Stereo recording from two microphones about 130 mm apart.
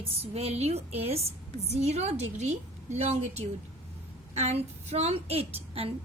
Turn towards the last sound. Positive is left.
turn(degrees=-50)  # may be behind; listen again after turning